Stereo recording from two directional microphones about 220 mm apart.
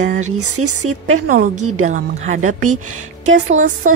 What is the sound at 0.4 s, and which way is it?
Speech, 85° right.